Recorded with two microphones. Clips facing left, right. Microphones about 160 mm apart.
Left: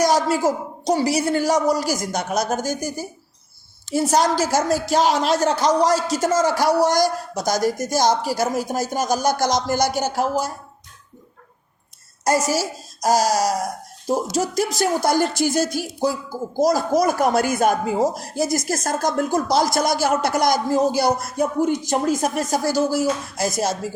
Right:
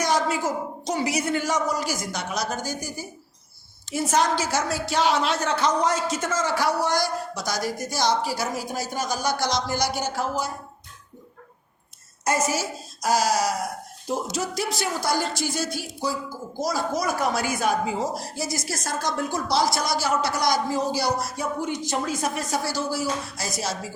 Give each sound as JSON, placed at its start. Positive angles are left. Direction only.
{"t": 0.0, "sound": "a woman's voice", "side_deg": 40}
{"t": 12.2, "sound": "a woman's voice", "side_deg": 35}